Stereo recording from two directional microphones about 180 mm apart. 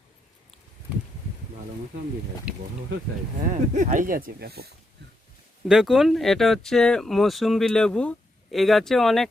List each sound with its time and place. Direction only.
2.5 s speech: 5° right (ahead or behind)
3.5 s speech: 40° right (ahead or behind); by 4.7 s 60° right (ahead or behind)
5.6 s speech: centre (ahead or behind)